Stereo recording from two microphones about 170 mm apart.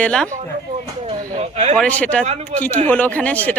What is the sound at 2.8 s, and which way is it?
Speech, 10° left (ahead or behind).